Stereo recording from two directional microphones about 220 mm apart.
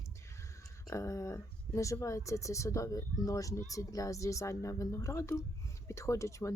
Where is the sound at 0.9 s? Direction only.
15° left (ahead or behind).